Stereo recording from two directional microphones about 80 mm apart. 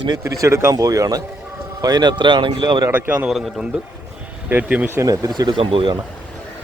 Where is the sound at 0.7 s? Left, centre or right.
Right.